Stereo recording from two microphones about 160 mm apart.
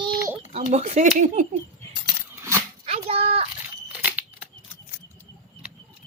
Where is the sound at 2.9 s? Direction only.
40° right (ahead or behind).